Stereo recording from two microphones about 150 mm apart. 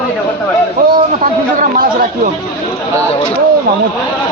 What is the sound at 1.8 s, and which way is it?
Speech, 70° right (ahead or behind).